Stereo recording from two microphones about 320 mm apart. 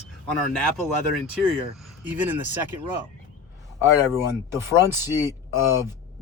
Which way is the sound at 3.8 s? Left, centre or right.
Centre.